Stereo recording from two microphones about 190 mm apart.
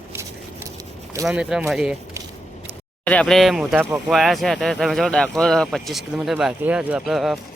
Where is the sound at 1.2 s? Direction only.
5° right (ahead or behind).